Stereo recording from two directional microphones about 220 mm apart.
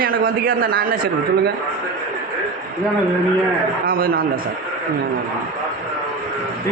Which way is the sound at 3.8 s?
40° right (ahead or behind).